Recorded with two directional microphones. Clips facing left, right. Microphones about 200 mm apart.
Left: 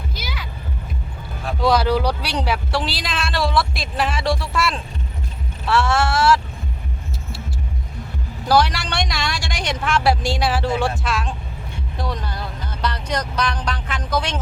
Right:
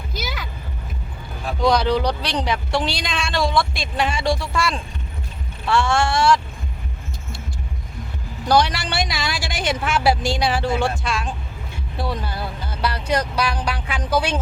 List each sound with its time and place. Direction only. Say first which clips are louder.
0.1 s a sound: right 3 dB; 45° right (ahead or behind)
1.5 s speech: even; 5° left (ahead or behind)
8.4 s speech: even; centre (ahead or behind)